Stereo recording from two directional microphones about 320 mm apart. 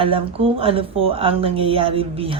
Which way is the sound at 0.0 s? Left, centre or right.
Centre.